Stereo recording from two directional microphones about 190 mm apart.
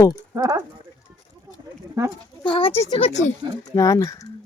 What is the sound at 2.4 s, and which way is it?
Speech, 30° left (ahead or behind).